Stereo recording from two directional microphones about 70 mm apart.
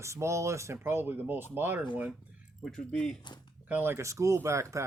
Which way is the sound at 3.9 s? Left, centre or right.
Right.